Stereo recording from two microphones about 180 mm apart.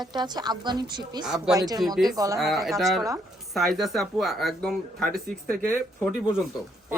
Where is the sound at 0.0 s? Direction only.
25° right (ahead or behind).